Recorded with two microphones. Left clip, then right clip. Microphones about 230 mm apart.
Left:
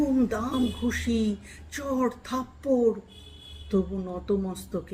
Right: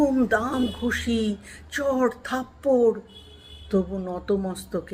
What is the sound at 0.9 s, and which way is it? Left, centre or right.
Speech, centre.